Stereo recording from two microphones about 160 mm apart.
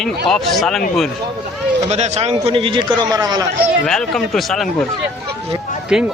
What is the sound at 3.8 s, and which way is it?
Speech, centre (ahead or behind).